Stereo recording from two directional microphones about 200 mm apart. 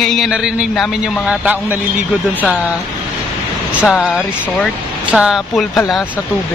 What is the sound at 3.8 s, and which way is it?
A man's voice, centre (ahead or behind).